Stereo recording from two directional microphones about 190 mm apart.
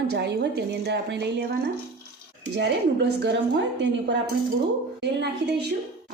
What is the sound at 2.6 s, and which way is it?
A woman's voice, 65° right (ahead or behind).